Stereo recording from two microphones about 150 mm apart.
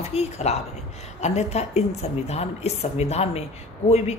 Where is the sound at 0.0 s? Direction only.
45° left (ahead or behind).